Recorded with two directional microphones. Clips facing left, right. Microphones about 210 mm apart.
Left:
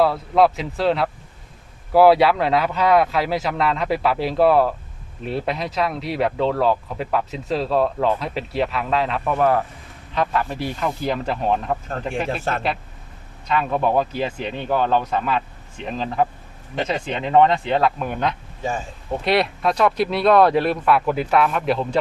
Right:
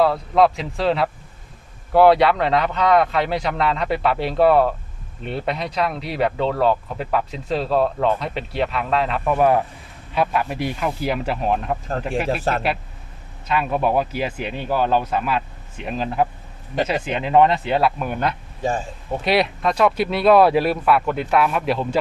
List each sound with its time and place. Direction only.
0.0 s speech: centre (ahead or behind)
9.4 s speech: 15° right (ahead or behind)
13.5 s speech: 10° right (ahead or behind)